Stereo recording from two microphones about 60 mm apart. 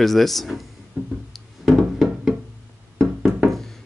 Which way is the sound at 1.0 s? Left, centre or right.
Right.